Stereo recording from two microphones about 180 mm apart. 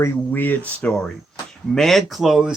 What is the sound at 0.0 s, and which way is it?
Speech, 10° left (ahead or behind).